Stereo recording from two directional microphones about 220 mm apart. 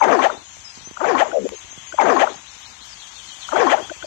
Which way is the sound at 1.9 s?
50° left (ahead or behind).